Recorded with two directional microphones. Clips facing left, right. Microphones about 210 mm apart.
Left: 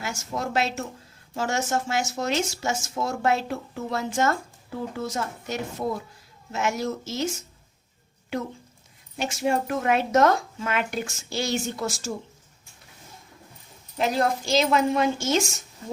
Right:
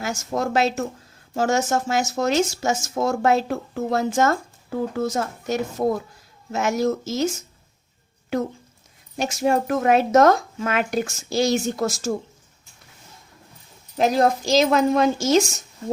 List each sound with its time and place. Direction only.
0.0 s speech: 45° right (ahead or behind)
9.1 s speech: 40° right (ahead or behind)
14.0 s a woman's voice: 40° right (ahead or behind)